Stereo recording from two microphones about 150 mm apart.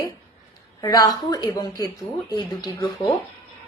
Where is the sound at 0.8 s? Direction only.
25° left (ahead or behind).